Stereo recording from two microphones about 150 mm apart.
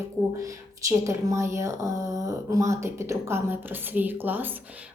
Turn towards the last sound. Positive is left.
turn(degrees=-10)  # may be behind; listen again after turning